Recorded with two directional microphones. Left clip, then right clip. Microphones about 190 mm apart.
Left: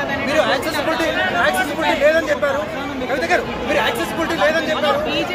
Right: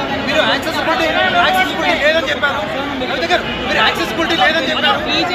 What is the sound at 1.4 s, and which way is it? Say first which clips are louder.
Speech: right 4 dB; 45° left (ahead or behind).